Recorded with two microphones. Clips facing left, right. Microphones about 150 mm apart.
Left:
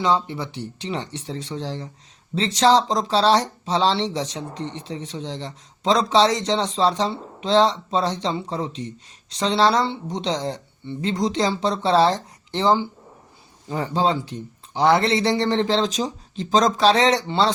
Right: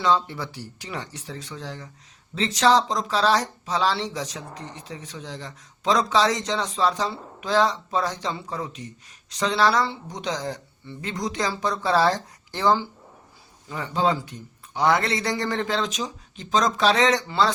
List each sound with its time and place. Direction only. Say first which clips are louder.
0.0 s speech: left 1 dB; 20° left (ahead or behind)
13.7 s speech: left 2 dB; 35° left (ahead or behind)